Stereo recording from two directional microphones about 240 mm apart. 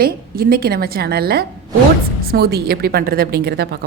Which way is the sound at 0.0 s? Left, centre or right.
Right.